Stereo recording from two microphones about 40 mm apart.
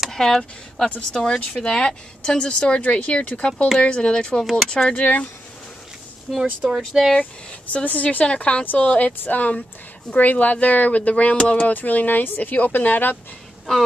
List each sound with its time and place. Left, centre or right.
0.1 s speech: centre
4.4 s speech: centre
4.6 s speech: left
4.9 s speech: left
6.3 s speech: centre
7.7 s speech: left
9.5 s speech: left